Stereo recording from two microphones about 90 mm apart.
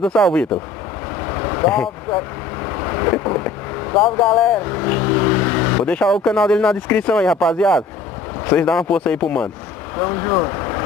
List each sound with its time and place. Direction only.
0.0 s speech: 10° left (ahead or behind)
1.3 s vehicle: 25° left (ahead or behind)
1.7 s speech: 10° left (ahead or behind)
2.1 s vehicle: 20° left (ahead or behind)
3.9 s speech: 5° left (ahead or behind)
4.6 s vehicle: 20° left (ahead or behind)
6.0 s speech: 5° left (ahead or behind)
9.9 s speech: 25° left (ahead or behind)
10.4 s vehicle: 25° left (ahead or behind)